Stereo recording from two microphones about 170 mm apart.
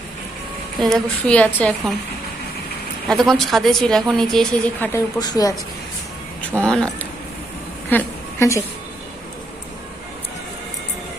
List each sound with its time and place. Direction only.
0.8 s a woman's voice: 5° left (ahead or behind)
3.1 s a woman's voice: centre (ahead or behind)
4.9 s speech: 20° left (ahead or behind)
6.6 s a woman's voice: 5° left (ahead or behind)
7.9 s a sound: 15° left (ahead or behind)